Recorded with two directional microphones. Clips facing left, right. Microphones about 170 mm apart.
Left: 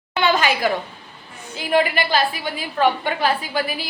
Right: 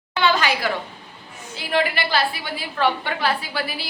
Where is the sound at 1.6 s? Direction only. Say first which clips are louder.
Left 3 dB; 15° left (ahead or behind).